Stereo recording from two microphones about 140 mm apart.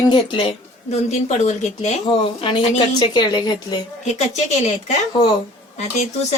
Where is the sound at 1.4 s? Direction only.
55° left (ahead or behind).